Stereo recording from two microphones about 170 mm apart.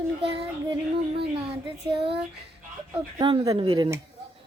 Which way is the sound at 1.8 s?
30° right (ahead or behind).